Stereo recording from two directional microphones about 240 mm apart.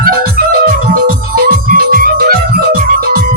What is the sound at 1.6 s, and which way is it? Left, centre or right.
Music, right.